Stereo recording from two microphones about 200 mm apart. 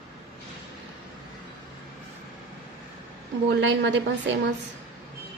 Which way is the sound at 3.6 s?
65° right (ahead or behind).